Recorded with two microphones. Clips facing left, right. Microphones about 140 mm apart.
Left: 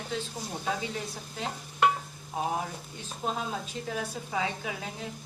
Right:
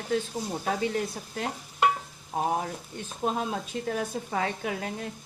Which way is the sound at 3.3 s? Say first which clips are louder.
Right 4 dB; 50° right (ahead or behind).